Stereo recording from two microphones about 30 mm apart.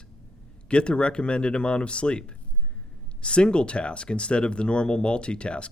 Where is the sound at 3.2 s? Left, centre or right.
Left.